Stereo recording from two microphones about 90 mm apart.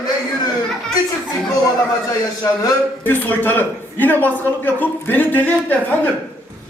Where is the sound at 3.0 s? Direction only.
20° left (ahead or behind).